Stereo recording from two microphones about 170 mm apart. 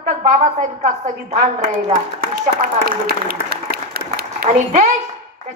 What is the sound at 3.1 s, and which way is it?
Speech, 65° right (ahead or behind).